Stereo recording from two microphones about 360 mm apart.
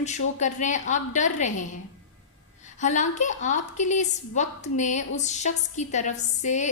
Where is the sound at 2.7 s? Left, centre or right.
Centre.